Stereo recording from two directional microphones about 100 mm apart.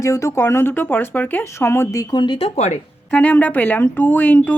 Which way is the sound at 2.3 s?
90° left.